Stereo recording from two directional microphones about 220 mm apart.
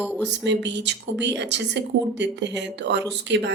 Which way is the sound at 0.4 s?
50° right (ahead or behind).